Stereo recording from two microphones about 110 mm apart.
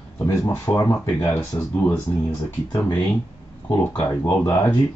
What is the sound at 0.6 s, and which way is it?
Speech, 25° left (ahead or behind).